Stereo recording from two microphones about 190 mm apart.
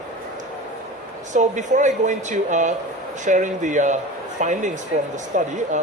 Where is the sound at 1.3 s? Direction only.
40° right (ahead or behind).